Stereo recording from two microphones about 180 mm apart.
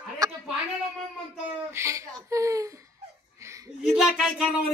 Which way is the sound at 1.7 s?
15° right (ahead or behind).